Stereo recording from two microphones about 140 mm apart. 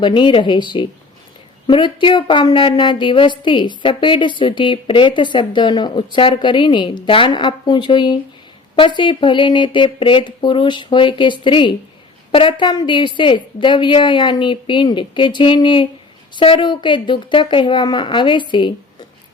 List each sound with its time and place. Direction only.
0.0 s a woman's voice: 35° left (ahead or behind)